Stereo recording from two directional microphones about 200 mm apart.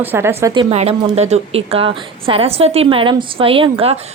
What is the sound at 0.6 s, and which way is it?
A woman's voice, 30° right (ahead or behind).